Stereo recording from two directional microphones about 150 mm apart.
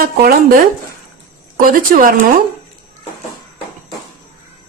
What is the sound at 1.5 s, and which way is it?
Speech, 70° right (ahead or behind).